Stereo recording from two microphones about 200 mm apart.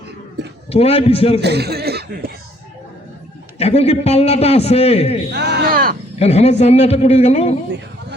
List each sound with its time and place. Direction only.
0.7 s a man's voice: 30° left (ahead or behind)
1.4 s speech: 55° right (ahead or behind)
3.6 s a man's voice: 30° left (ahead or behind)
5.3 s a sound: 60° right (ahead or behind)
6.1 s a man's voice: 30° left (ahead or behind)